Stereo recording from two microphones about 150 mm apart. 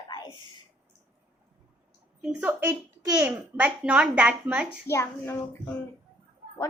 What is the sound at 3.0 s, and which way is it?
Speech, 25° right (ahead or behind).